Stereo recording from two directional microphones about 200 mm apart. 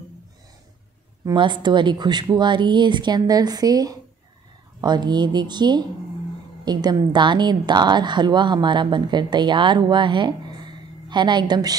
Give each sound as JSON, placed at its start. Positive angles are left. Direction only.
{"t": 1.2, "sound": "a woman's voice", "side_deg": -25}